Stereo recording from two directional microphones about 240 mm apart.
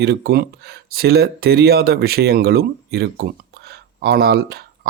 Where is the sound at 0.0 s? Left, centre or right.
Right.